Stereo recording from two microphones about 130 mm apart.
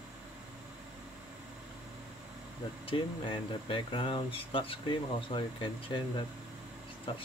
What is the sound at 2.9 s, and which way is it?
Speech, 40° left (ahead or behind).